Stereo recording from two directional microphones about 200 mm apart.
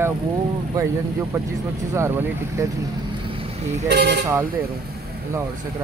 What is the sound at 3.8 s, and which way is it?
Speech, 55° right (ahead or behind).